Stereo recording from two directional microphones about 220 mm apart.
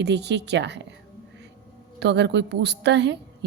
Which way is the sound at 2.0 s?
50° right (ahead or behind).